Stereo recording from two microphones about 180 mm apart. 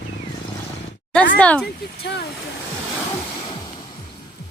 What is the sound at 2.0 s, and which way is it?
Speech, 70° left (ahead or behind).